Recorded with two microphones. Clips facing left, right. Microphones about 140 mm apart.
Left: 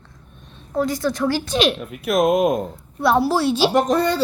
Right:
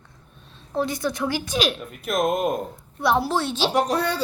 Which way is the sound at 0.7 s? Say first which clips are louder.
Left 4 dB; 20° right (ahead or behind).